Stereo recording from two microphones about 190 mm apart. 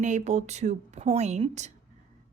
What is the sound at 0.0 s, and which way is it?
Speech, 40° right (ahead or behind).